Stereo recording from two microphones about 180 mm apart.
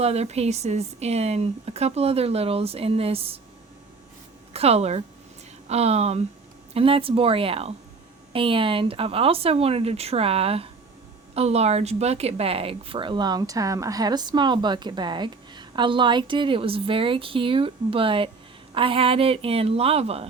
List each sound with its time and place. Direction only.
0.0 s speech: 35° right (ahead or behind)
4.5 s speech: 35° right (ahead or behind)